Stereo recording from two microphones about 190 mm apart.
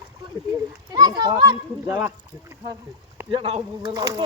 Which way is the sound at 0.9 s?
20° right (ahead or behind).